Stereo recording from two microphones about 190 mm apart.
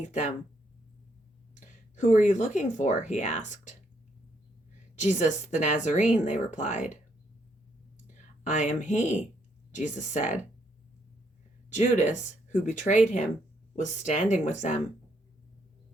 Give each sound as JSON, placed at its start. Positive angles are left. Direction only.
{"t": 0.0, "sound": "speech", "side_deg": 40}
{"t": 1.5, "sound": "speech", "side_deg": 40}
{"t": 4.9, "sound": "speech", "side_deg": 40}
{"t": 8.0, "sound": "speech", "side_deg": 40}
{"t": 11.7, "sound": "speech", "side_deg": 40}